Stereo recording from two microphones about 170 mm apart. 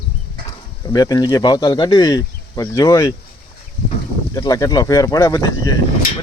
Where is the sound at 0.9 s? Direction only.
20° left (ahead or behind).